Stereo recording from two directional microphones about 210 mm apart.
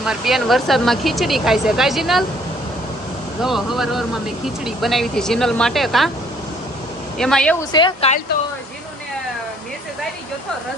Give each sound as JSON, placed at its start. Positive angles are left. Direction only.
{"t": 0.0, "sound": "speech", "side_deg": 0}
{"t": 3.4, "sound": "speech", "side_deg": 0}
{"t": 7.2, "sound": "speech", "side_deg": 5}
{"t": 7.7, "sound": "speech", "side_deg": 20}